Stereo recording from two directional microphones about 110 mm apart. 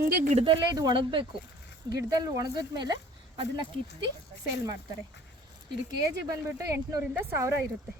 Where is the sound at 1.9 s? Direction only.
35° right (ahead or behind).